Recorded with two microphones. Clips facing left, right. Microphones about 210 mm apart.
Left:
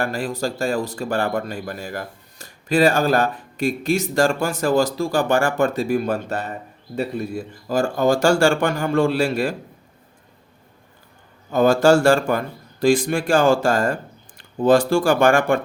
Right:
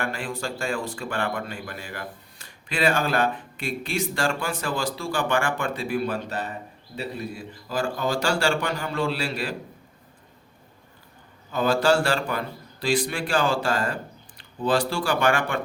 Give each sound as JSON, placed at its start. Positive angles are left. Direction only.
{"t": 0.0, "sound": "a man's voice", "side_deg": 40}
{"t": 11.5, "sound": "speech", "side_deg": 45}